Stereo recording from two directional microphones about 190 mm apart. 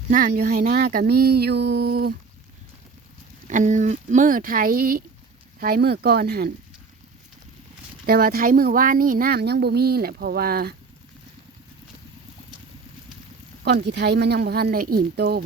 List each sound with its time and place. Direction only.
0.1 s a woman's voice: 45° right (ahead or behind)
3.4 s a woman's voice: 40° right (ahead or behind)
8.0 s a woman's voice: 50° right (ahead or behind)
13.7 s speech: 60° right (ahead or behind)